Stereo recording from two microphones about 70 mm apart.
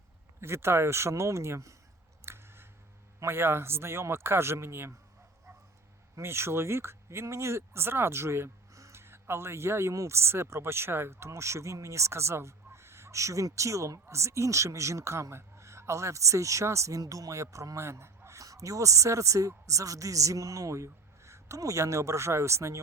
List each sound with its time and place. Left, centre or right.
0.4 s speech: right
2.2 s a sound: right
3.2 s speech: right
6.1 s speech: right
17.0 s speech: right